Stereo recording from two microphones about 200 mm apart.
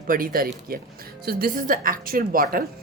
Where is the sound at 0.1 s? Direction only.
45° right (ahead or behind).